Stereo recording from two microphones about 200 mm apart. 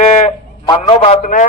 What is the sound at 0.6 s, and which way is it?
Speech, 25° left (ahead or behind).